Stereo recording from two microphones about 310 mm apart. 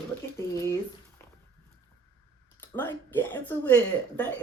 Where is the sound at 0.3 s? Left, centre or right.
Centre.